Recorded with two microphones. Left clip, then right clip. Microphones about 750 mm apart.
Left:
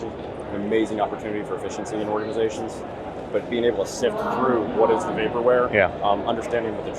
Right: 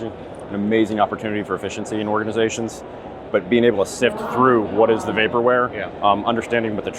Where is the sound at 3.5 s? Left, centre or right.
Right.